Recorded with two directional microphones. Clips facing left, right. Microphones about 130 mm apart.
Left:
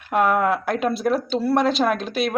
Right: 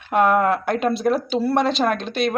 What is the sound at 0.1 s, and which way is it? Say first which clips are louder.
Speech: right 2 dB; centre (ahead or behind).